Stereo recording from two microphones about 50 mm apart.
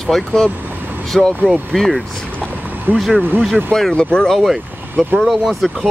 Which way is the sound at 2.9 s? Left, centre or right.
Right.